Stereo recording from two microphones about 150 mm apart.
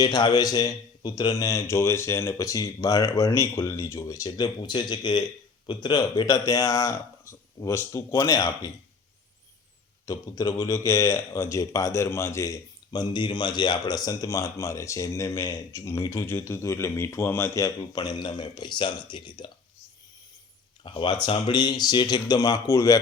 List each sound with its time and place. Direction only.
0.0 s a man's voice: 30° left (ahead or behind)
10.1 s a man's voice: 25° left (ahead or behind)
20.8 s a man's voice: 35° left (ahead or behind)